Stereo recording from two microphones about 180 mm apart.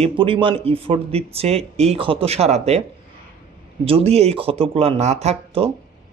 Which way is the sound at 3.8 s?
35° right (ahead or behind).